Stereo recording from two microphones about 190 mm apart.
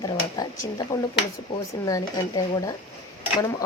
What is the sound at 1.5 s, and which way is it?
Speech, 25° left (ahead or behind).